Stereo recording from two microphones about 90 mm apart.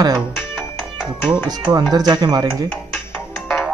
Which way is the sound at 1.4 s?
50° right (ahead or behind).